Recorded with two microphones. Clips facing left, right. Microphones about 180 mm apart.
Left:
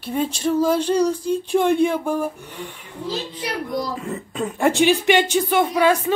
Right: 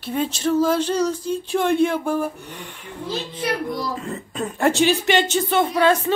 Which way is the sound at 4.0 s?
10° left (ahead or behind).